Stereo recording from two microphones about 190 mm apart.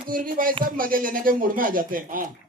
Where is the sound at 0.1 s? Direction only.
45° right (ahead or behind).